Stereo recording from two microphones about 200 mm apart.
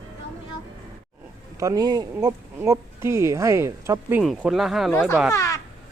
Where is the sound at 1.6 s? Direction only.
15° right (ahead or behind).